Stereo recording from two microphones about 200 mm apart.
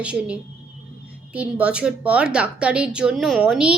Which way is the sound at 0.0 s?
5° right (ahead or behind).